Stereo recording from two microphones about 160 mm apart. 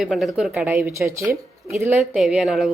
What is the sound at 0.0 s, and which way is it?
Speech, centre (ahead or behind).